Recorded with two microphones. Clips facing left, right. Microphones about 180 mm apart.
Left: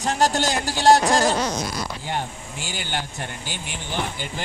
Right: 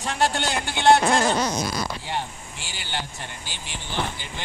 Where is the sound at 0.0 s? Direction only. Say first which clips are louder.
Left 3 dB; 40° left (ahead or behind).